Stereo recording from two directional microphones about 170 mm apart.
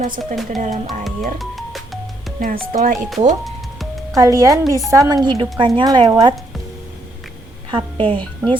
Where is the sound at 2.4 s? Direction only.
55° right (ahead or behind).